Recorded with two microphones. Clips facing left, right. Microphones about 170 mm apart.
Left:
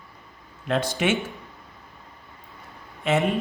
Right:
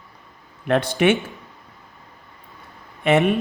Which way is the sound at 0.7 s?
60° right (ahead or behind).